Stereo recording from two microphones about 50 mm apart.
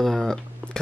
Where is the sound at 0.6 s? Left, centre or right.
Right.